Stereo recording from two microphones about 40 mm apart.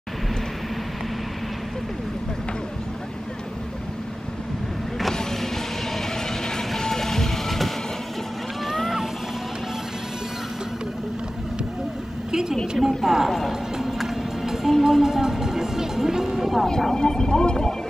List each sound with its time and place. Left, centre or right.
5.1 s power windows: centre
5.9 s train: centre
8.6 s a sound: centre
12.3 s a sound: centre
12.7 s a woman's voice: centre
13.5 s clip-clop: centre
14.0 s music: centre
16.6 s speech: centre